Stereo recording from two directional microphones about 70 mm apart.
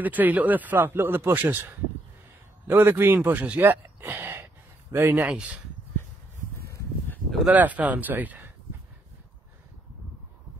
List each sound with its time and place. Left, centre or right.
0.0 s a man's voice: right
5.3 s speech: centre
7.4 s a man's voice: right